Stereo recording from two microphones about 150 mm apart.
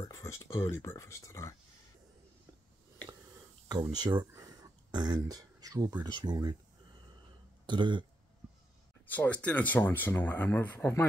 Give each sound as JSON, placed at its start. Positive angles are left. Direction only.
{"t": 0.0, "sound": "speech", "side_deg": 20}
{"t": 3.9, "sound": "speech", "side_deg": -30}
{"t": 4.3, "sound": "a sound", "side_deg": -20}
{"t": 5.2, "sound": "speech", "side_deg": -25}
{"t": 7.6, "sound": "speech", "side_deg": -30}
{"t": 9.0, "sound": "speech", "side_deg": 10}